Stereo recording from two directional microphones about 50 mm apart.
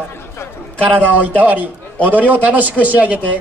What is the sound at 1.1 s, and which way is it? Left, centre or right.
A man's voice, right.